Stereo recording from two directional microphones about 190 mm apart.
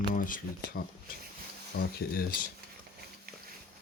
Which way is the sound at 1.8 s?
50° left (ahead or behind).